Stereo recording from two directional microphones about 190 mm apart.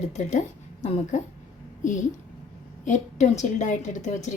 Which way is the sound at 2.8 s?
40° left (ahead or behind).